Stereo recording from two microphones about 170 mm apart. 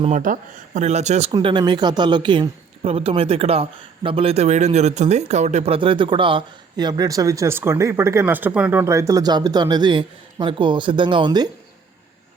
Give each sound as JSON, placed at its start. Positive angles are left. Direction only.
{"t": 0.0, "sound": "speech", "side_deg": -50}
{"t": 1.3, "sound": "a woman's voice", "side_deg": -30}